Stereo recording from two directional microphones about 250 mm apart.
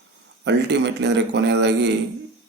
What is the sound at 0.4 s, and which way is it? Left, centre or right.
Speech, right.